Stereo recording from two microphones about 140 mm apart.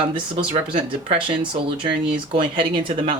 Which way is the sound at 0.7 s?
40° right (ahead or behind).